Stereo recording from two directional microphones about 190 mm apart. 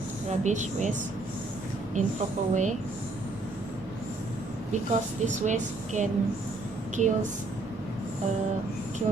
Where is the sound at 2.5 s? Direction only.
40° right (ahead or behind).